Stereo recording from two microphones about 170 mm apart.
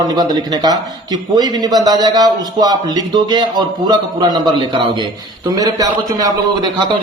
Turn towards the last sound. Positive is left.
turn(degrees=-20)  # may be behind; listen again after turning